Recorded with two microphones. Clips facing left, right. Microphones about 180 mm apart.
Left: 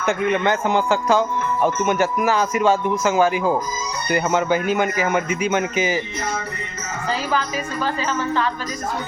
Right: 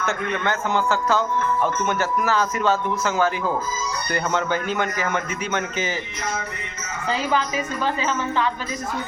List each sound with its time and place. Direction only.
0.0 s speech: 15° left (ahead or behind)